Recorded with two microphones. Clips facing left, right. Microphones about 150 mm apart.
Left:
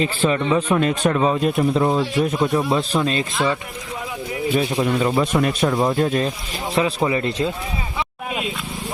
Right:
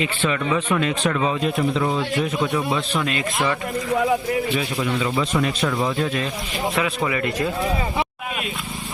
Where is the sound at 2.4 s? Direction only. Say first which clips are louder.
Left 3 dB; 25° left (ahead or behind).